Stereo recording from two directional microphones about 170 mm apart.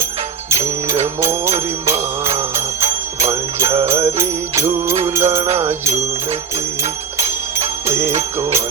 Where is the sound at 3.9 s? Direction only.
15° right (ahead or behind).